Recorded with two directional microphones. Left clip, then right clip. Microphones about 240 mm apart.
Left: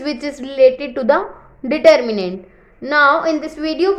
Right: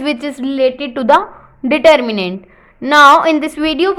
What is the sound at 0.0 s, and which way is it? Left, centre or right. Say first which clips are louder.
A woman's voice: right 5 dB; right.